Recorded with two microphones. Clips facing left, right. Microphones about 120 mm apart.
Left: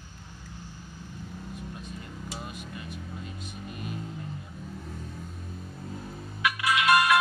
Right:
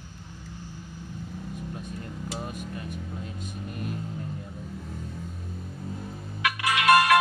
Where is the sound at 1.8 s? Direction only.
45° right (ahead or behind).